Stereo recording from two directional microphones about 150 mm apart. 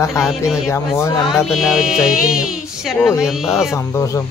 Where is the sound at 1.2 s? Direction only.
Centre (ahead or behind).